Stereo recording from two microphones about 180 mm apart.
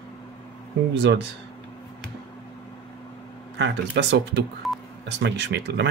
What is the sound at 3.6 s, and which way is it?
Speech, 70° right (ahead or behind).